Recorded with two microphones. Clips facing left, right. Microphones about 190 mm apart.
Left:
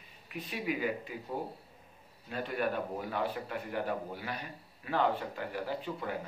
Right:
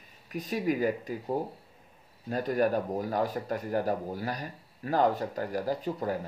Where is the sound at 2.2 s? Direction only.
40° right (ahead or behind).